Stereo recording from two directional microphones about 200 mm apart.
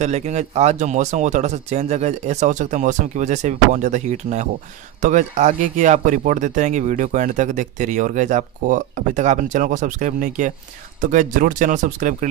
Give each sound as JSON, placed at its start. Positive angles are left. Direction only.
{"t": 0.0, "sound": "speech", "side_deg": -35}